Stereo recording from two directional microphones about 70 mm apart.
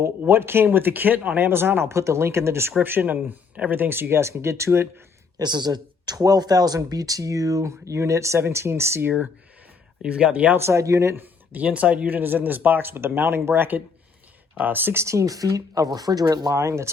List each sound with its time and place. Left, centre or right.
0.2 s speech: right
2.8 s speech: right
5.4 s speech: right
10.0 s speech: centre
10.6 s speech: right
11.2 s speech: right
15.0 s speech: right
16.6 s speech: right